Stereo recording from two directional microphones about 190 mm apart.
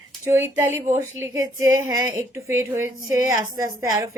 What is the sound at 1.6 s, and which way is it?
Speech, 15° right (ahead or behind).